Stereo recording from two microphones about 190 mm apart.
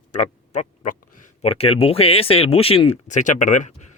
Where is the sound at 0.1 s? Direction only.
40° left (ahead or behind).